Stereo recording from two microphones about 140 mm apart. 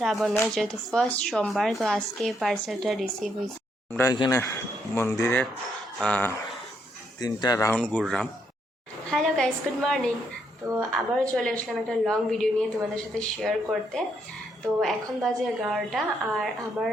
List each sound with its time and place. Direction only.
0.0 s speech: centre (ahead or behind)
4.3 s speech: 20° left (ahead or behind)
7.2 s speech: 25° left (ahead or behind)
7.7 s speech: 5° left (ahead or behind)